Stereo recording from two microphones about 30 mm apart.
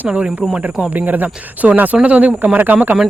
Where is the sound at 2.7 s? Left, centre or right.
Right.